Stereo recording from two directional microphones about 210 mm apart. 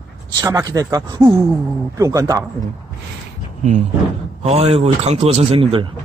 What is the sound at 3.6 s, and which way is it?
Speech, 35° right (ahead or behind).